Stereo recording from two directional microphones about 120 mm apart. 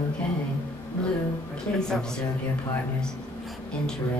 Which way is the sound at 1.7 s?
10° left (ahead or behind).